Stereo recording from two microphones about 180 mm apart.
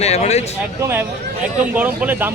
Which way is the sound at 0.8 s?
10° right (ahead or behind).